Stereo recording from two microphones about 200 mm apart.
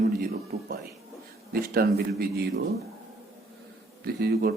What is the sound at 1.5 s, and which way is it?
Speech, 50° right (ahead or behind).